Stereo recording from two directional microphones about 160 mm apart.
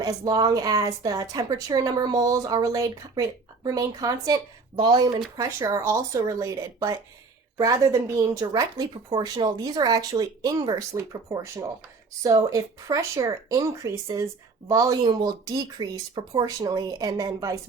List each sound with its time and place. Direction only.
0.0 s a woman's voice: 25° right (ahead or behind)